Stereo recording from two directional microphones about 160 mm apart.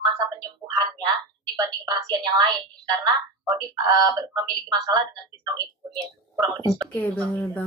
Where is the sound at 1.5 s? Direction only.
25° right (ahead or behind).